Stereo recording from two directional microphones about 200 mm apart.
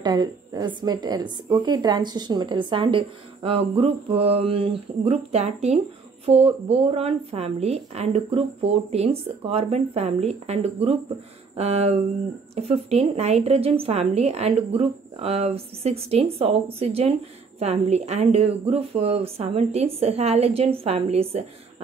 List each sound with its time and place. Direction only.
0.0 s a woman's voice: 20° right (ahead or behind)